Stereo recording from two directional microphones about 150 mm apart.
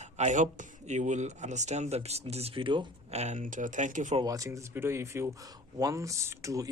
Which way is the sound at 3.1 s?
50° right (ahead or behind).